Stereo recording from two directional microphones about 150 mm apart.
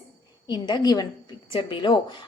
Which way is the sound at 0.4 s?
30° left (ahead or behind).